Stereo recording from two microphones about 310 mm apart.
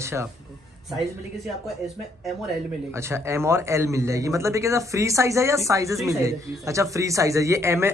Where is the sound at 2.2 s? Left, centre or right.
Centre.